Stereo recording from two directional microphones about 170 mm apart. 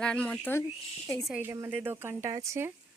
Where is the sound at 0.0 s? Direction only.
5° left (ahead or behind).